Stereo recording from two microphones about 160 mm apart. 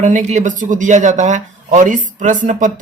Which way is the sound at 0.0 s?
50° right (ahead or behind).